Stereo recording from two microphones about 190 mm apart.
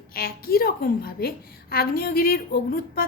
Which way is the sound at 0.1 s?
50° left (ahead or behind).